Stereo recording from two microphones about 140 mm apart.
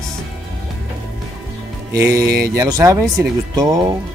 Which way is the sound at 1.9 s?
20° right (ahead or behind).